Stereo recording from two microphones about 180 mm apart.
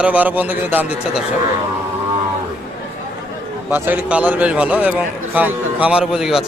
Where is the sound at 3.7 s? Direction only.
10° right (ahead or behind).